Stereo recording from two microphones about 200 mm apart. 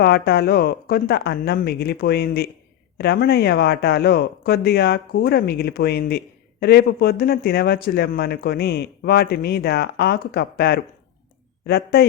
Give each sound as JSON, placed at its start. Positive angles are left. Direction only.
{"t": 0.0, "sound": "speech", "side_deg": 55}